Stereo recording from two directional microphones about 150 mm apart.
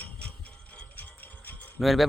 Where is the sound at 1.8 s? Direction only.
Centre (ahead or behind).